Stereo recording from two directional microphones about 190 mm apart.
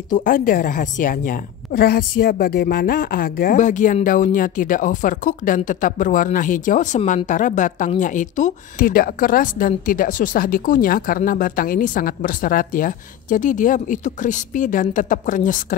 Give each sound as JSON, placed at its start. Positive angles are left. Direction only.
{"t": 0.1, "sound": "speech", "side_deg": 45}